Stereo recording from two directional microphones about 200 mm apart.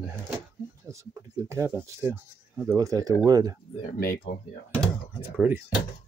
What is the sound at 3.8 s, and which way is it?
Speech, 40° left (ahead or behind).